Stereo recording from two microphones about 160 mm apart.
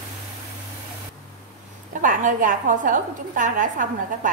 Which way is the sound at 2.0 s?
55° right (ahead or behind).